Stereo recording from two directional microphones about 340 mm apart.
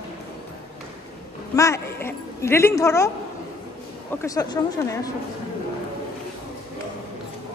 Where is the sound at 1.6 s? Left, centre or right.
Centre.